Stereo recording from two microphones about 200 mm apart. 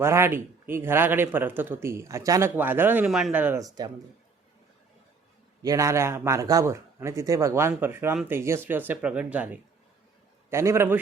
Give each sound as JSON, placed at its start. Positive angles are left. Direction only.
{"t": 0.0, "sound": "speech", "side_deg": -15}
{"t": 5.6, "sound": "speech", "side_deg": -15}